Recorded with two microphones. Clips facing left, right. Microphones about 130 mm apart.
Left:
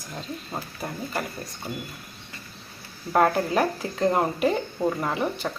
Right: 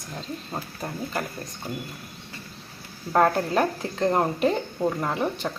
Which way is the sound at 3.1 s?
5° left (ahead or behind).